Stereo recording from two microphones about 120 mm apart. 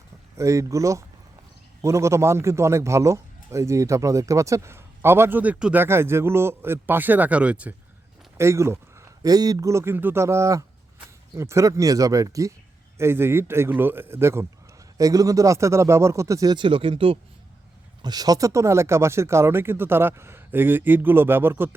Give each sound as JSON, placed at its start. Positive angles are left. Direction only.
{"t": 0.3, "sound": "a man's voice", "side_deg": -25}
{"t": 5.8, "sound": "a man's voice", "side_deg": -20}
{"t": 8.4, "sound": "a man's voice", "side_deg": -25}
{"t": 18.0, "sound": "a man's voice", "side_deg": -35}